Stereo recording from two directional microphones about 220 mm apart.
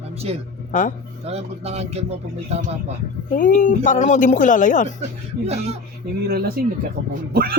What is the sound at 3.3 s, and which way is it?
A woman's voice, 40° left (ahead or behind).